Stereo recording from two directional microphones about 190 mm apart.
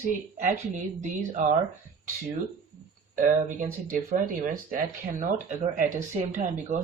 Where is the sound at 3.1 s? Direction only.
45° right (ahead or behind).